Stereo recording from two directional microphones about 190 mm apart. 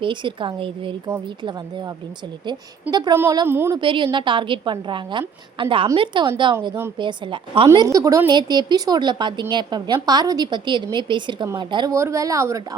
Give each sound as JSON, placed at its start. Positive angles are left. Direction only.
{"t": 0.0, "sound": "a woman's voice", "side_deg": -25}
{"t": 2.9, "sound": "a woman's voice", "side_deg": -20}
{"t": 3.8, "sound": "a woman's voice", "side_deg": -25}